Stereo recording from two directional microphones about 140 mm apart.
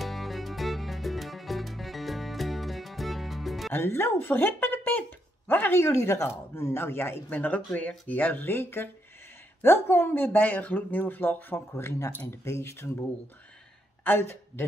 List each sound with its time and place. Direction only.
0.0 s music: centre (ahead or behind)
3.7 s speech: 15° left (ahead or behind)
14.0 s speech: 15° left (ahead or behind)